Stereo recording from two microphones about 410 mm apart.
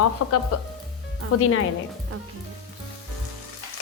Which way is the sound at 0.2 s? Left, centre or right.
Left.